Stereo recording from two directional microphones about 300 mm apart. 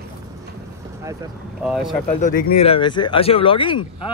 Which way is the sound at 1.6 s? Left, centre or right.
Centre.